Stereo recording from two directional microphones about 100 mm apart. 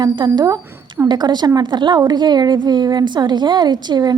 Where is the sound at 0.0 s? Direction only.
45° right (ahead or behind).